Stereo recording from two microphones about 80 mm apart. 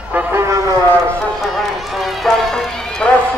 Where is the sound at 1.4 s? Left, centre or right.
Centre.